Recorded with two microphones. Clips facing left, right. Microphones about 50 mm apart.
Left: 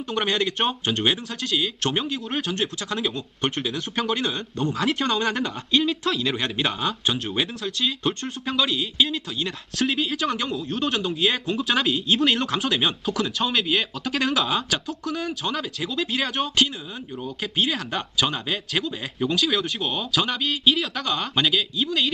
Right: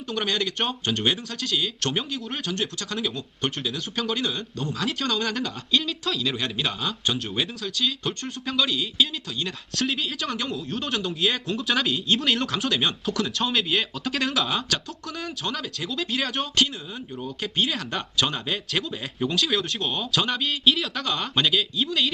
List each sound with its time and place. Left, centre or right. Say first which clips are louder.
0.1 s speech: left 2 dB; centre
6.3 s a man's voice: left 3 dB; left; by 22.1 s centre